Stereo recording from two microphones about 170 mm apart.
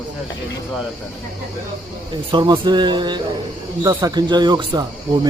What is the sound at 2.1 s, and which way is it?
Speech, 25° right (ahead or behind).